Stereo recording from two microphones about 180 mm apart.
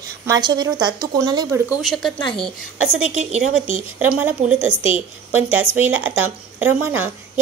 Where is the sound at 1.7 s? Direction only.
Centre (ahead or behind).